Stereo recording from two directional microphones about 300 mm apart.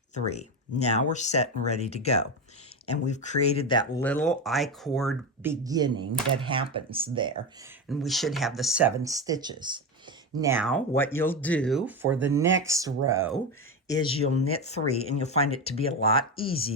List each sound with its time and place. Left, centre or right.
0.1 s speech: left; by 7.4 s centre
7.9 s speech: centre
13.8 s speech: centre